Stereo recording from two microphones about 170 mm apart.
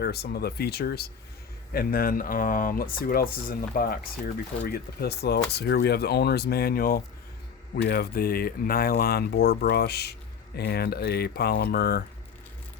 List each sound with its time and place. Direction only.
0.0 s speech: 70° left (ahead or behind)